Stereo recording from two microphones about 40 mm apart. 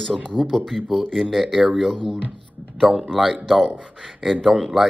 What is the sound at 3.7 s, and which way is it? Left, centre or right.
Speech, right.